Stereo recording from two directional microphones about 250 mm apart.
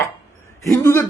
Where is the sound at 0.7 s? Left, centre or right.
Centre.